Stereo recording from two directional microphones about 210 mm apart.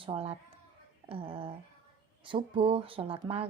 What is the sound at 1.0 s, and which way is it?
Speech, 25° right (ahead or behind).